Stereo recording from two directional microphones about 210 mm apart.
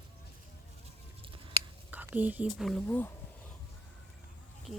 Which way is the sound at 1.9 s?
10° right (ahead or behind).